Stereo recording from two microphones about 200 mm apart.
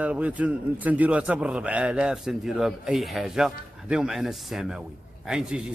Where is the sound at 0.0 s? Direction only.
5° right (ahead or behind).